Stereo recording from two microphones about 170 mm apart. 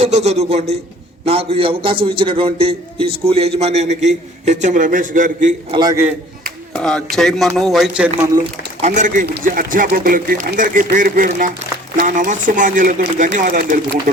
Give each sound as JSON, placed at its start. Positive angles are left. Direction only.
{"t": 0.0, "sound": "a man's voice", "side_deg": -40}
{"t": 5.7, "sound": "a man's voice", "side_deg": -25}
{"t": 6.7, "sound": "speech", "side_deg": 5}
{"t": 8.8, "sound": "speech", "side_deg": -50}
{"t": 9.2, "sound": "speech", "side_deg": -65}